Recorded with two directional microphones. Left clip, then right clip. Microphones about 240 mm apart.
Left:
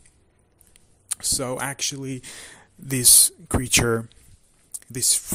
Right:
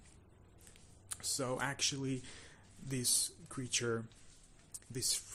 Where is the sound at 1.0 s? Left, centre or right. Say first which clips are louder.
Left 12 dB; left.